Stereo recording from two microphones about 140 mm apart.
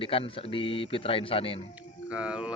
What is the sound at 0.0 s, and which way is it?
A man's voice, 40° left (ahead or behind).